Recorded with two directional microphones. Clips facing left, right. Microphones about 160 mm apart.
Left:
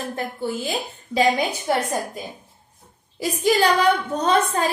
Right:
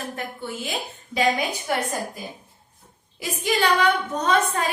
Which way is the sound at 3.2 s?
35° left (ahead or behind).